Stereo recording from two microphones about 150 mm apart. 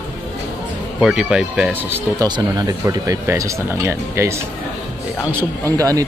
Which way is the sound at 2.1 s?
25° right (ahead or behind).